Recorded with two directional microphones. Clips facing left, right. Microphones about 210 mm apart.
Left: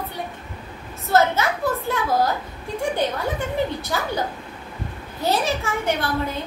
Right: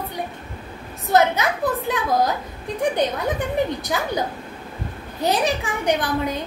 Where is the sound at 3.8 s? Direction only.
15° right (ahead or behind).